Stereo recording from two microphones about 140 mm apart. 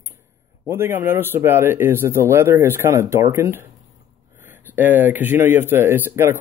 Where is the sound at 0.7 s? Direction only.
15° right (ahead or behind).